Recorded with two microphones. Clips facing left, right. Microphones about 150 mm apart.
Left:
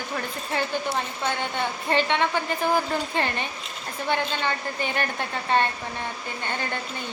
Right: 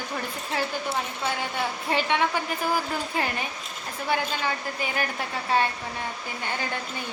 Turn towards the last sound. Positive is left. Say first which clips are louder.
# left 1 dB
turn(degrees=-10)  # may be behind; listen again after turning